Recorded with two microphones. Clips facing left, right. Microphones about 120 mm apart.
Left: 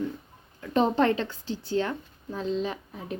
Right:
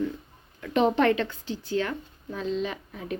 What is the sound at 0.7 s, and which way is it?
A woman's voice, 35° left (ahead or behind).